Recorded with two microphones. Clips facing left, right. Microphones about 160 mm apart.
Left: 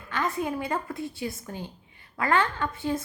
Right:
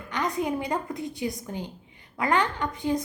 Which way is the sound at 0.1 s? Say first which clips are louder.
Right 1 dB; 20° right (ahead or behind).